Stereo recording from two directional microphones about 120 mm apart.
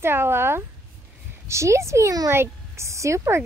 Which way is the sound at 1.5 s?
25° right (ahead or behind).